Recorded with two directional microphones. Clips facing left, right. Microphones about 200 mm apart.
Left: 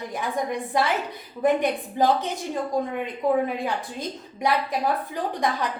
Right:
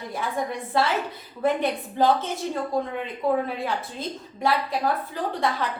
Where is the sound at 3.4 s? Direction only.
15° left (ahead or behind).